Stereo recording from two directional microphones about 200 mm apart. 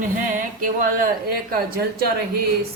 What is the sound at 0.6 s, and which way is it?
Speech, 45° right (ahead or behind).